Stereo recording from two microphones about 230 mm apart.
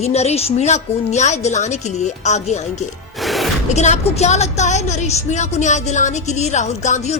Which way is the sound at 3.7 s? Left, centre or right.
Left.